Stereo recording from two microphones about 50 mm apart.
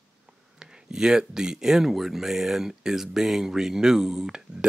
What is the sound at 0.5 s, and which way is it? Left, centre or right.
Speech, centre.